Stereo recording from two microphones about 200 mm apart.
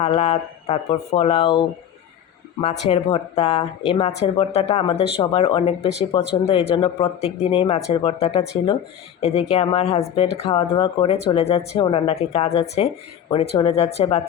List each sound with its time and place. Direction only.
0.0 s speech: 30° left (ahead or behind)